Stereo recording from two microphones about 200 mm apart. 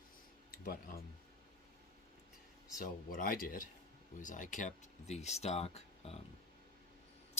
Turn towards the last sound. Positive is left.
turn(degrees=30)  # may be behind; listen again after turning